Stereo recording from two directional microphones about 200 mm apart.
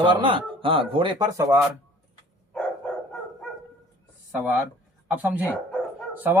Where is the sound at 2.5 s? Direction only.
5° left (ahead or behind).